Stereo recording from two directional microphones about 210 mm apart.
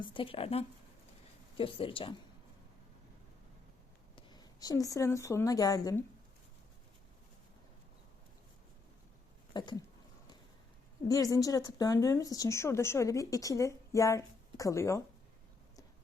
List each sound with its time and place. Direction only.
0.0 s speech: 25° left (ahead or behind)
4.1 s speech: 20° left (ahead or behind)
9.5 s a sound: 20° left (ahead or behind)
11.1 s speech: 15° left (ahead or behind)